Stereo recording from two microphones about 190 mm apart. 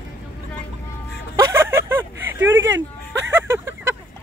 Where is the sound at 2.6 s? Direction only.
80° right.